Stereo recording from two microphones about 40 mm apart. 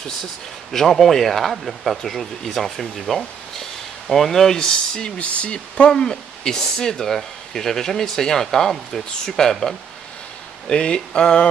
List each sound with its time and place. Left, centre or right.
0.2 s speech: centre
5.1 s speech: left; by 9.8 s centre
10.7 s speech: left